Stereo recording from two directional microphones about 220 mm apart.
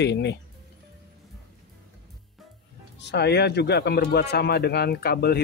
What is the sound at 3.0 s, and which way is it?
Speech, 50° left (ahead or behind).